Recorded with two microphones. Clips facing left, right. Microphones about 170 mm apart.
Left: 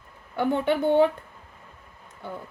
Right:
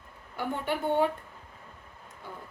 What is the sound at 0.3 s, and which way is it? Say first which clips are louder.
Speech: left 8 dB; 70° left (ahead or behind).